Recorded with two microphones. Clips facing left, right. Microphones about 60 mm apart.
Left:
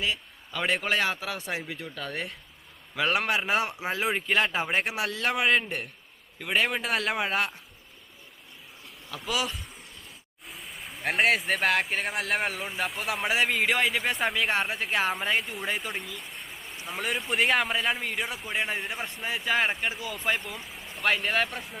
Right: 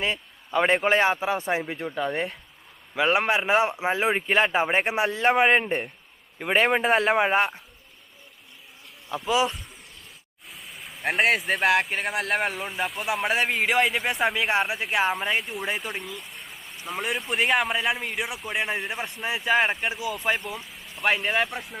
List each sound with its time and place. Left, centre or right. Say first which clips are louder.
0.0 s speech: right 3 dB; right
9.1 s speech: right 8 dB; right
10.4 s a sound: even; centre
11.1 s speech: right 2 dB; centre
13.5 s speech: right 3 dB; centre
21.0 s speech: right 2 dB; centre